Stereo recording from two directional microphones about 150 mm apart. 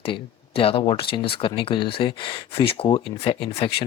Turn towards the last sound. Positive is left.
turn(degrees=40)  # may be behind; listen again after turning